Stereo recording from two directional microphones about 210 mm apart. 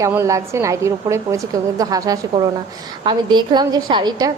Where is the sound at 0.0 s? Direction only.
15° right (ahead or behind).